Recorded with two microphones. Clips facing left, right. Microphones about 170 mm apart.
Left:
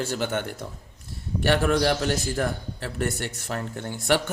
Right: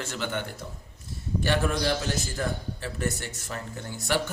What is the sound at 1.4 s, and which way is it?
A man's voice, 65° left (ahead or behind).